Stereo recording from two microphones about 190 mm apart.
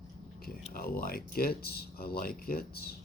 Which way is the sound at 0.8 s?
50° left (ahead or behind).